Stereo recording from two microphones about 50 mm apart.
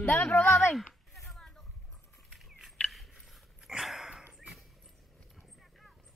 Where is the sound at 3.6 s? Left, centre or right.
Centre.